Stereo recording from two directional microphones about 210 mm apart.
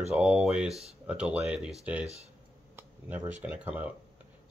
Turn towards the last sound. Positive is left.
turn(degrees=-5)  # may be behind; listen again after turning